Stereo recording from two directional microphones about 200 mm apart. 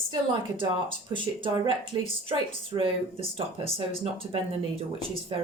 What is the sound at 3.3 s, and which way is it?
Speech, 30° right (ahead or behind).